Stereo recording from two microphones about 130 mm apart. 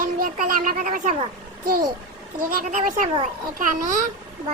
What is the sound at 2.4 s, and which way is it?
A child's voice, 90° right.